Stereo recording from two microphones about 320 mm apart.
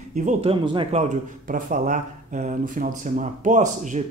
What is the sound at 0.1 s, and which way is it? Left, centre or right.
Speech, right.